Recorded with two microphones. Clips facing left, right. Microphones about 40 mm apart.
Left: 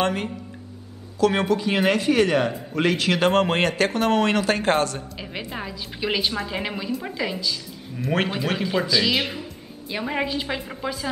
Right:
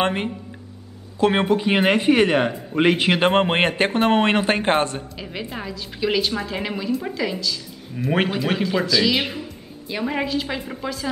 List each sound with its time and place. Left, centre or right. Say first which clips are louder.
0.0 s speech: right 2 dB; right
5.1 s a woman's voice: right 1 dB; centre
7.9 s speech: right 3 dB; centre
8.6 s a woman's voice: right 1 dB; centre